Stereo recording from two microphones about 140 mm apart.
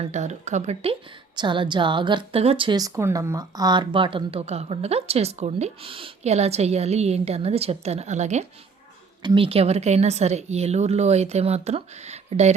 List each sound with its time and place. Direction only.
0.0 s speech: 55° right (ahead or behind)
1.4 s a woman's voice: 35° right (ahead or behind)
2.9 s speech: 20° right (ahead or behind); by 8.4 s 55° right (ahead or behind)
9.2 s speech: 40° right (ahead or behind)